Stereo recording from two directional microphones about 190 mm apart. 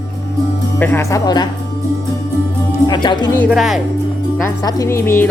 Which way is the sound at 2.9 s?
25° left (ahead or behind).